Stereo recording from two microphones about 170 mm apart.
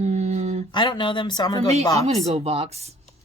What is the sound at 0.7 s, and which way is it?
Speech, 30° left (ahead or behind).